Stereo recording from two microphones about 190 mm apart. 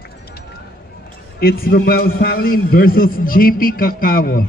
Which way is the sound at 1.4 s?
55° left (ahead or behind).